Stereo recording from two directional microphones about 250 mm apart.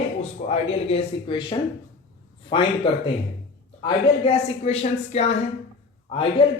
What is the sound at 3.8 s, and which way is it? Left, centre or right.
A woman's voice, left.